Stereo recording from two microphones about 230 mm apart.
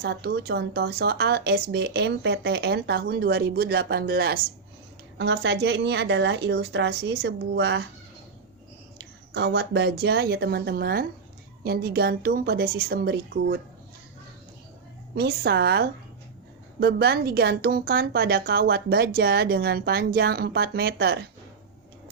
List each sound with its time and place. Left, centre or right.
0.0 s a woman's voice: right
9.0 s a woman's voice: right
15.1 s a woman's voice: right